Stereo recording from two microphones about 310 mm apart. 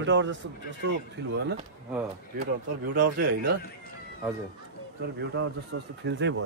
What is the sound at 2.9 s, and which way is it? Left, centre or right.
Speech, right.